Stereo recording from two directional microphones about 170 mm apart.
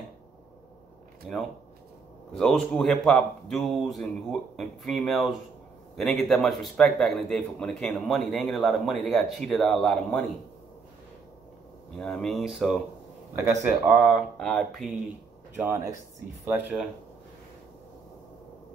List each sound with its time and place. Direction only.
1.3 s a man's voice: centre (ahead or behind)
12.0 s a man's voice: centre (ahead or behind)
13.8 s a man's voice: 5° right (ahead or behind)
15.6 s speech: 15° right (ahead or behind)